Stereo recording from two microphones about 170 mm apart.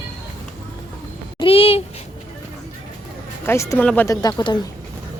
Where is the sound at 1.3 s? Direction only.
35° left (ahead or behind).